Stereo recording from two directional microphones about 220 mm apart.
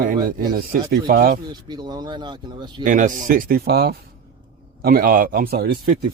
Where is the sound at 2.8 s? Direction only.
35° right (ahead or behind).